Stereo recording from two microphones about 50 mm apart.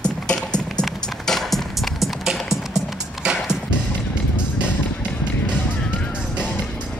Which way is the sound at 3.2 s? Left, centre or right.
Centre.